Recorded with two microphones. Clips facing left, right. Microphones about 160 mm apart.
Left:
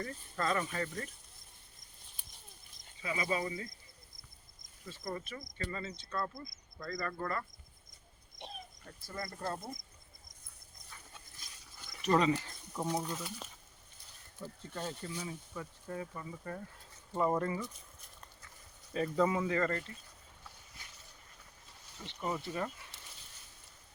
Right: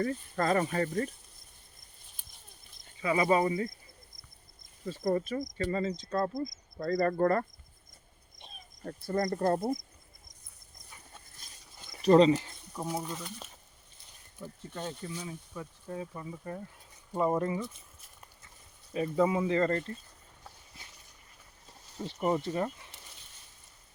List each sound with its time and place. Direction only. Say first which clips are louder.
0.0 s speech: right 7 dB; 40° right (ahead or behind)
3.0 s speech: right 9 dB; 60° right (ahead or behind)
4.9 s speech: right 12 dB; 45° right (ahead or behind)
6.7 s cricket: right 12 dB; 35° right (ahead or behind)
8.4 s cricket: left 6 dB; 70° left (ahead or behind)
8.8 s cricket: right 14 dB; 55° right (ahead or behind)
11.8 s a sound: right 9 dB; 25° right (ahead or behind)
12.7 s speech: even; 5° right (ahead or behind)
14.4 s speech: right 2 dB; 10° right (ahead or behind)
18.9 s speech: right 3 dB; 15° right (ahead or behind)
21.9 s speech: right 8 dB; 40° right (ahead or behind)
22.4 s speech: right 6 dB; 25° right (ahead or behind)